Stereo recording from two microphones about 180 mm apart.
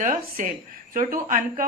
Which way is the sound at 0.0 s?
45° right (ahead or behind).